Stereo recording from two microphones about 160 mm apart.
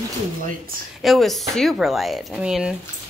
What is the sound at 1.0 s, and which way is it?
Speech, centre (ahead or behind).